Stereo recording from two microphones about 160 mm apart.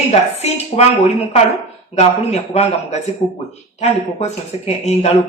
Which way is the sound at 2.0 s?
40° left (ahead or behind).